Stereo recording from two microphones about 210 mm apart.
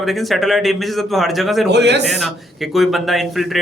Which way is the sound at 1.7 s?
55° right (ahead or behind).